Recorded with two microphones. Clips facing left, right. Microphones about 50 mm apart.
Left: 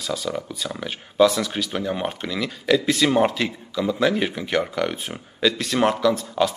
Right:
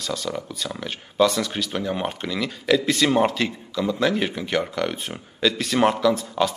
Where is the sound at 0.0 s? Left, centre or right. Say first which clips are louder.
Left 1 dB; centre.